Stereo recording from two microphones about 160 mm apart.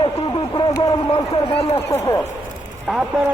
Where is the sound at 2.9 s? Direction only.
5° right (ahead or behind).